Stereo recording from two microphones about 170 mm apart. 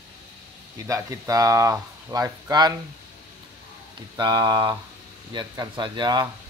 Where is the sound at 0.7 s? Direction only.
20° right (ahead or behind).